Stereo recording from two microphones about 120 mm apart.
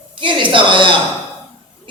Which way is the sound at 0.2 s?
40° right (ahead or behind).